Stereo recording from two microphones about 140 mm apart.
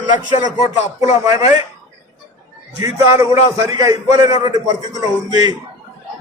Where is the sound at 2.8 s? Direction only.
20° right (ahead or behind).